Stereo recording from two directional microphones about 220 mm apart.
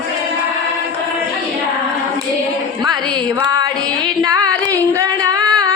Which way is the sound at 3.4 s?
15° right (ahead or behind).